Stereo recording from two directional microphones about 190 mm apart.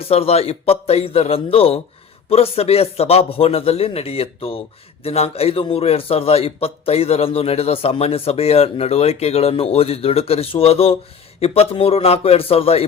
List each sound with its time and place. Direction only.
0.0 s a man's voice: 30° left (ahead or behind)